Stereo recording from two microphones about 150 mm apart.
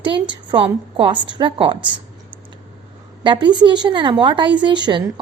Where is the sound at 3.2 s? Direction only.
30° right (ahead or behind).